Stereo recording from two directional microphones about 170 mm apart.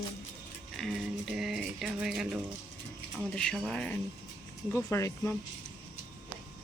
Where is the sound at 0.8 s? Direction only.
Centre (ahead or behind).